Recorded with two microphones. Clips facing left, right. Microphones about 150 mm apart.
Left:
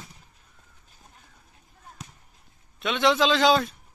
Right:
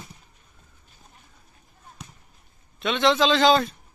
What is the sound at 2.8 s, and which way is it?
Speech, 5° left (ahead or behind).